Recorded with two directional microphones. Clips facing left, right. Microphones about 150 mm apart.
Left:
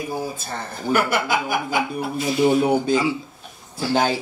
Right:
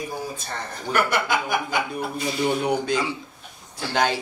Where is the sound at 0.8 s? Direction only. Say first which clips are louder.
Left 2 dB; 5° left (ahead or behind).